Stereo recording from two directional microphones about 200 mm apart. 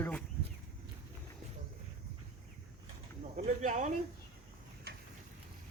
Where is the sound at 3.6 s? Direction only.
35° right (ahead or behind).